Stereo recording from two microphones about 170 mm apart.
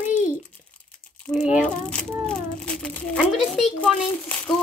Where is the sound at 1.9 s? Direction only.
5° left (ahead or behind).